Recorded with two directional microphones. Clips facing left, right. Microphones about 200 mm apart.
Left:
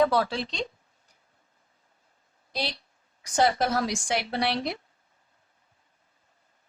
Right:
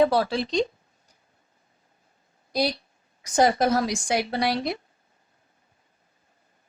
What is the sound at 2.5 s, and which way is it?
Speech, 40° right (ahead or behind).